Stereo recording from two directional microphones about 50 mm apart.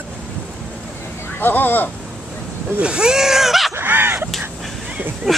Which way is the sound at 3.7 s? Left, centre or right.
Right.